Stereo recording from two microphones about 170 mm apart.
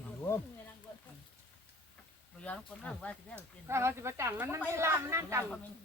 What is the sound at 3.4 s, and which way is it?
Speech, 15° right (ahead or behind).